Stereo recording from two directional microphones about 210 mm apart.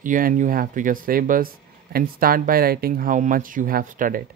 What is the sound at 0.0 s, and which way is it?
Speech, 40° right (ahead or behind).